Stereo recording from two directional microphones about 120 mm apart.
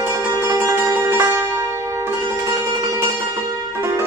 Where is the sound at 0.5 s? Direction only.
25° right (ahead or behind).